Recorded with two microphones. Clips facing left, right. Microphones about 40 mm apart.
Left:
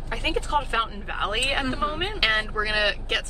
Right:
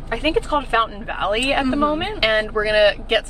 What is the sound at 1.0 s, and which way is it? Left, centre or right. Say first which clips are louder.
Speech: right 6 dB; centre.